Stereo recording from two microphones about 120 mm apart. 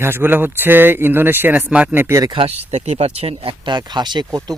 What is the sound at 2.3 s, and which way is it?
Speech, 55° right (ahead or behind).